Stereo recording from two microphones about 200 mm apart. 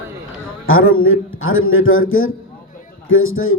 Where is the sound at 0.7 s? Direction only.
90° left.